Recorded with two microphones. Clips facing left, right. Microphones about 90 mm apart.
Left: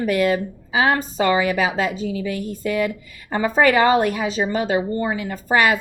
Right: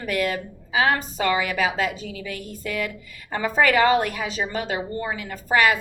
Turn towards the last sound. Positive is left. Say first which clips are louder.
# left 2 dB
turn(degrees=25)  # may be behind; listen again after turning